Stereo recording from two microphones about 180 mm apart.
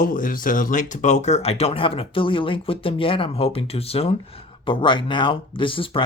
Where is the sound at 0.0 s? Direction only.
50° left (ahead or behind).